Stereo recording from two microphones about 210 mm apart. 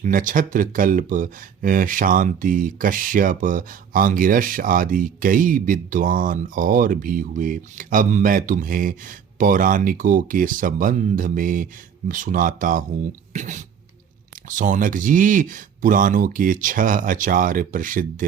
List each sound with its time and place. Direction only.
0.0 s speech: 40° right (ahead or behind)